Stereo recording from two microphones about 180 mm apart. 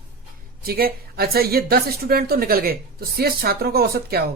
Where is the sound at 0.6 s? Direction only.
55° right (ahead or behind).